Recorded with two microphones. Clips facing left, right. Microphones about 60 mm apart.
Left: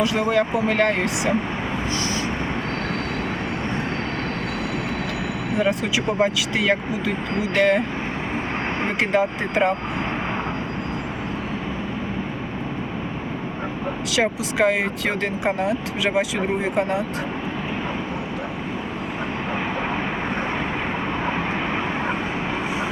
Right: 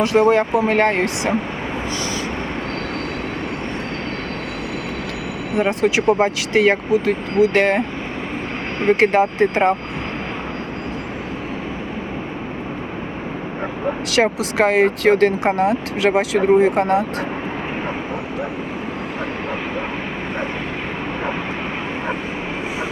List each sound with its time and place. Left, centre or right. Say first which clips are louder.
0.0 s speech: right 5 dB; right
5.5 s speech: right 5 dB; right
9.0 s speech: right 5 dB; right
14.1 s speech: right 4 dB; right
15.4 s speech: right 5 dB; right